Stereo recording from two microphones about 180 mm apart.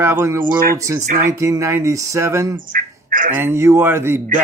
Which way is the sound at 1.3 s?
15° right (ahead or behind).